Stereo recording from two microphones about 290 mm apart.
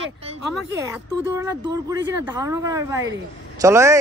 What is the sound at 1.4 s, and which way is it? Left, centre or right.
Speech, centre.